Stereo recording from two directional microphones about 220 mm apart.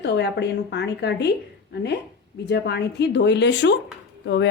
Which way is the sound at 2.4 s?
50° left (ahead or behind).